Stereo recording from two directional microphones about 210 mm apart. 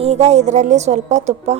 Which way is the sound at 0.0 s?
30° right (ahead or behind).